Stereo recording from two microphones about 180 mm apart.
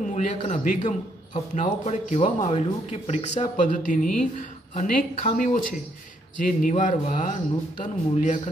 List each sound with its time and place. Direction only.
0.1 s a man's voice: 40° left (ahead or behind)